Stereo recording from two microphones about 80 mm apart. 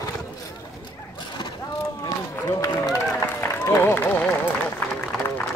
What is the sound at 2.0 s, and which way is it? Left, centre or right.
Run, left.